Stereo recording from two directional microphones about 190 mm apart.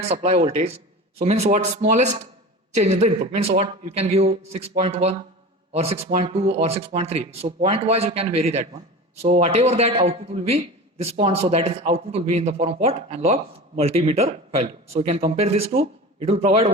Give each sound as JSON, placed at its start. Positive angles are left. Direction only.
{"t": 0.0, "sound": "a man's voice", "side_deg": -35}